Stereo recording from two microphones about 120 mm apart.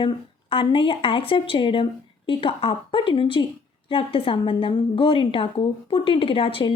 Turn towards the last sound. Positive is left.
turn(degrees=50)  # may be behind; listen again after turning